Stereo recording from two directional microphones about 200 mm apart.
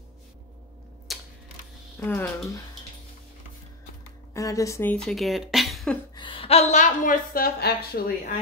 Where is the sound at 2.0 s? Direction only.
10° left (ahead or behind).